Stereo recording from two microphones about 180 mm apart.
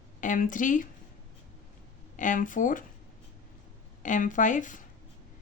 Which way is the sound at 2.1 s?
45° left (ahead or behind).